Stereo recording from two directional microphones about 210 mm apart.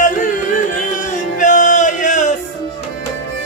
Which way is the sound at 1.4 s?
35° left (ahead or behind).